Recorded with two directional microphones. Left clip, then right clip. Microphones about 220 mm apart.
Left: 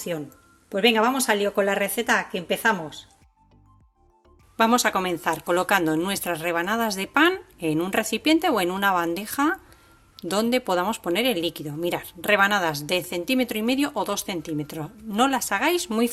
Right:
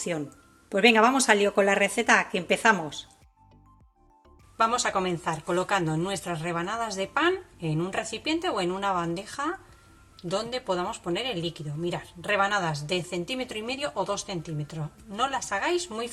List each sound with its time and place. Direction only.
0.7 s a woman's voice: centre (ahead or behind)
4.5 s speech: 50° left (ahead or behind)